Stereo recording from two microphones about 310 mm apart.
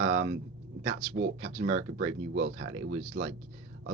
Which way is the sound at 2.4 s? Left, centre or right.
Right.